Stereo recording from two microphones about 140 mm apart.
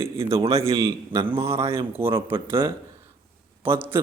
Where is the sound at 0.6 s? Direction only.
20° right (ahead or behind).